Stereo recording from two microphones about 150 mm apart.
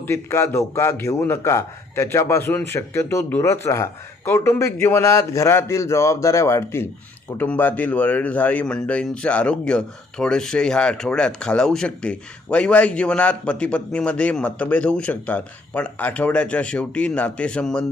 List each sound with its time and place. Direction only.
0.0 s a man's voice: 15° left (ahead or behind)